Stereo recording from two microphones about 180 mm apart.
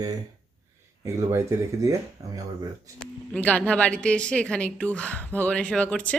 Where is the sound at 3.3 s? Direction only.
10° left (ahead or behind).